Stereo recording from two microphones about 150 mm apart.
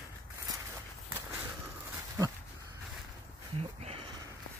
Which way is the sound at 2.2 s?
20° right (ahead or behind).